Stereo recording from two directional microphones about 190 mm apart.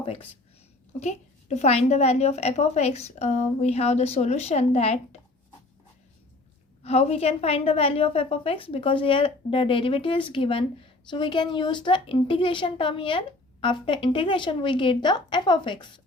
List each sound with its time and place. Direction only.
0.0 s a woman's voice: 30° left (ahead or behind)
6.8 s a woman's voice: 35° left (ahead or behind)